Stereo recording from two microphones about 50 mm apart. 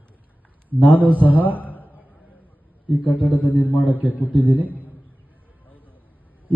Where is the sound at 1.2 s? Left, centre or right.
Right.